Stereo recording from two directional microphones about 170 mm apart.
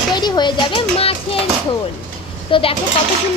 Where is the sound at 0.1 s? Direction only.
25° left (ahead or behind).